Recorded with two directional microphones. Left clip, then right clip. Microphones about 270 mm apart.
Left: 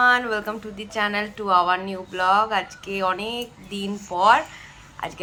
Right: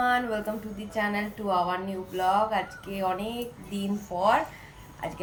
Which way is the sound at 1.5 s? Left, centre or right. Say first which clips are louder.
Left 9 dB; left.